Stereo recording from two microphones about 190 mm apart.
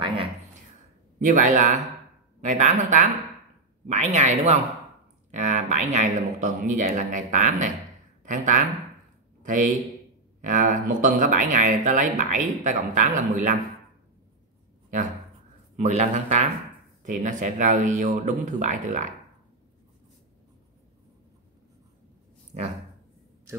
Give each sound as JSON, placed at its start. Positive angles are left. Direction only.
{"t": 0.0, "sound": "a sound", "side_deg": -25}
{"t": 1.2, "sound": "a man's voice", "side_deg": -45}
{"t": 15.7, "sound": "speech", "side_deg": -35}
{"t": 22.5, "sound": "speech", "side_deg": -40}